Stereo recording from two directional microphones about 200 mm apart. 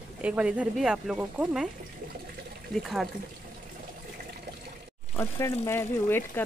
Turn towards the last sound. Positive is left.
turn(degrees=10)  # may be behind; listen again after turning